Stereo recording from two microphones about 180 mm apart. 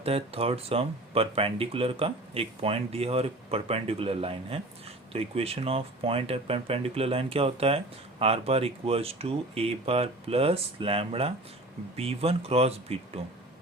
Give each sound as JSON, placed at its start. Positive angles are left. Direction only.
{"t": 0.0, "sound": "speech", "side_deg": -35}